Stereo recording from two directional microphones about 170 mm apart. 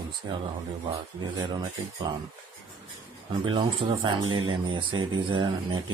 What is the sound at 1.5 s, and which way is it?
Speech, 25° right (ahead or behind).